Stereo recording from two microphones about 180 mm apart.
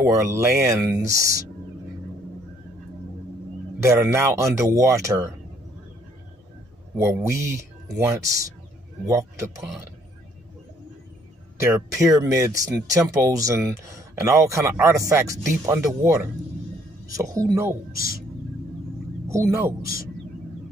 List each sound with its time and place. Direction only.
0.0 s speech: 15° right (ahead or behind)
3.8 s speech: 15° right (ahead or behind)
7.0 s speech: 15° right (ahead or behind)
11.7 s speech: 20° right (ahead or behind)
17.9 s speech: 55° left (ahead or behind)
19.2 s speech: 15° right (ahead or behind)